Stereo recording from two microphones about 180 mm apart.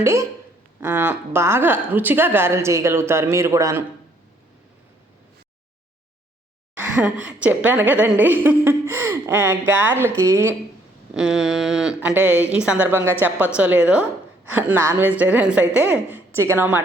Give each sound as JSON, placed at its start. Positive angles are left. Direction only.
{"t": 0.0, "sound": "a woman's voice", "side_deg": -15}
{"t": 6.7, "sound": "a woman's voice", "side_deg": -5}
{"t": 11.1, "sound": "a woman's voice", "side_deg": -5}